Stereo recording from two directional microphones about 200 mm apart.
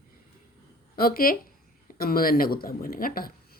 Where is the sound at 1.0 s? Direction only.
45° left (ahead or behind).